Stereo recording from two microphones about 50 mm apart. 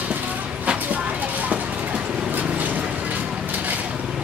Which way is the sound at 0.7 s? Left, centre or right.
Right.